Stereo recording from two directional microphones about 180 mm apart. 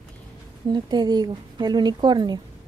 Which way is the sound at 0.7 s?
25° right (ahead or behind).